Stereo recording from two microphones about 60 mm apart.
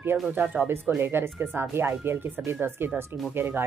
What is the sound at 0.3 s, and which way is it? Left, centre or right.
Speech, right.